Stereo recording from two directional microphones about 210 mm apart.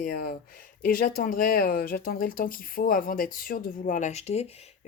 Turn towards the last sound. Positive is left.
turn(degrees=30)  # may be behind; listen again after turning